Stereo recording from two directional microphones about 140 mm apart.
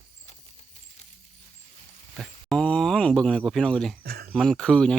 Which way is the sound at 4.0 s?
90° right.